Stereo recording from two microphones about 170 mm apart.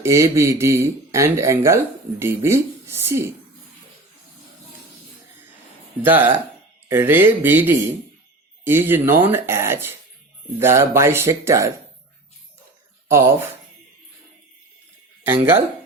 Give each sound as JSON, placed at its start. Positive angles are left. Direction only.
{"t": 0.0, "sound": "speech", "side_deg": -15}
{"t": 6.0, "sound": "speech", "side_deg": -10}
{"t": 13.1, "sound": "speech", "side_deg": -15}